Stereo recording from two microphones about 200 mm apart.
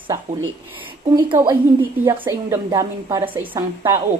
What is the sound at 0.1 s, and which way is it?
A woman's voice, 20° right (ahead or behind).